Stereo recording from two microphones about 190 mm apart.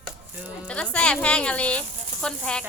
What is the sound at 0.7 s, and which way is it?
A woman's voice, 5° left (ahead or behind).